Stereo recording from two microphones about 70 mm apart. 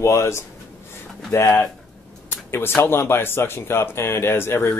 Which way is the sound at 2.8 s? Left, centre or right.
Left.